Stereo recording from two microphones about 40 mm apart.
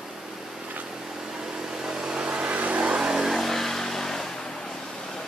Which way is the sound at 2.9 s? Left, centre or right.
Centre.